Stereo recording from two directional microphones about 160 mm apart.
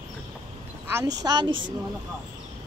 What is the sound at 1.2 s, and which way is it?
Speech, 25° right (ahead or behind).